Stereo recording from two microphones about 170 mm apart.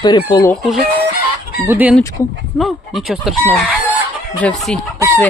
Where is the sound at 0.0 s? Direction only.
25° left (ahead or behind).